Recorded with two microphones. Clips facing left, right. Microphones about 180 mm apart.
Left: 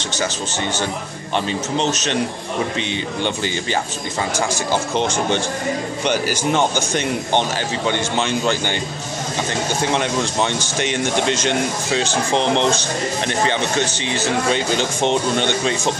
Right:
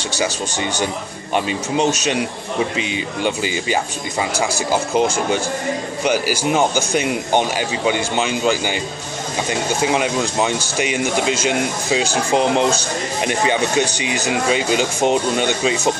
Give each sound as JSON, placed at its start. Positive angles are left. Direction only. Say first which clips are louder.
{"t": 1.3, "sound": "speech", "louder": "right 2 dB", "side_deg": -10}
{"t": 4.9, "sound": "speech", "louder": "right 3 dB", "side_deg": -10}